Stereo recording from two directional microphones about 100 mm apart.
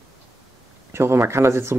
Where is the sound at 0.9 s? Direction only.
25° right (ahead or behind).